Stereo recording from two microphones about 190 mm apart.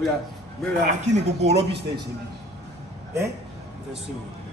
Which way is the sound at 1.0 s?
35° right (ahead or behind).